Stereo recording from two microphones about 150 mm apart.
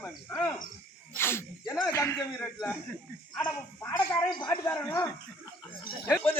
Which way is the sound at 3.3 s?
30° left (ahead or behind).